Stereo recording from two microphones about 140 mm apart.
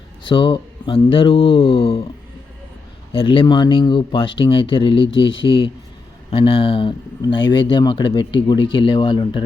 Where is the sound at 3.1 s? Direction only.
40° left (ahead or behind).